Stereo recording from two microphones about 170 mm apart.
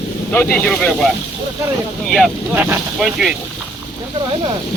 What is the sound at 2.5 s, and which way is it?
Speech, 10° right (ahead or behind).